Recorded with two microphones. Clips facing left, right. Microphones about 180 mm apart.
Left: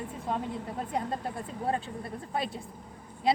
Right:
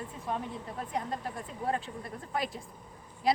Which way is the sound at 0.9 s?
30° left (ahead or behind).